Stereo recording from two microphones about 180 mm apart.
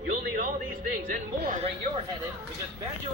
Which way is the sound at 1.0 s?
50° right (ahead or behind).